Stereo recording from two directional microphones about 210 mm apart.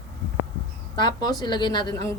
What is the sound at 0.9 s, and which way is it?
A woman's voice, 20° left (ahead or behind).